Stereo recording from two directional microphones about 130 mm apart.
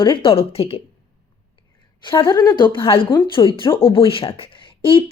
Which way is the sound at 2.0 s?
35° left (ahead or behind).